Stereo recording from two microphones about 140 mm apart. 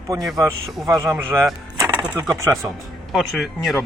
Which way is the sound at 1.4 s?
5° right (ahead or behind).